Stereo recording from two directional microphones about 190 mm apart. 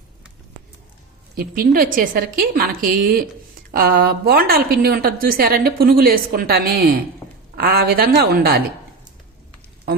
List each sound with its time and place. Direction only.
1.4 s a woman's voice: 50° right (ahead or behind)